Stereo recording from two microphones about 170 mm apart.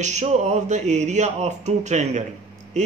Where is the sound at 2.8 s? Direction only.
45° right (ahead or behind).